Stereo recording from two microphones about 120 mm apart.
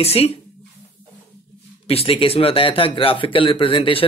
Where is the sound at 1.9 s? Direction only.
55° left (ahead or behind).